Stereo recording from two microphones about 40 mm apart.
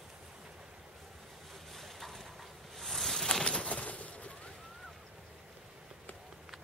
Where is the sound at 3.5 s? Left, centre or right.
Left.